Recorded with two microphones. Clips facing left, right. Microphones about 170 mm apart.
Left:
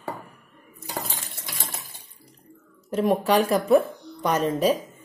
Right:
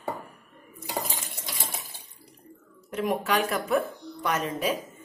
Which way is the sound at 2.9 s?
35° left (ahead or behind).